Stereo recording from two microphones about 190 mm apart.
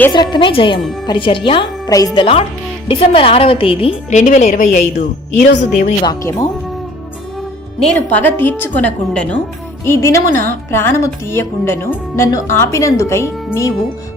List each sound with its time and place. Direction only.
0.1 s a woman's voice: 25° left (ahead or behind)
4.2 s speech: 40° left (ahead or behind)
6.0 s a woman's voice: 20° left (ahead or behind)
7.8 s speech: 5° left (ahead or behind)